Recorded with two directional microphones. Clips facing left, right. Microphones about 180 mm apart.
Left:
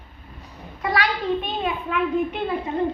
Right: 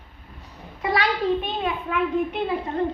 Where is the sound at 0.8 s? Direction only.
25° right (ahead or behind).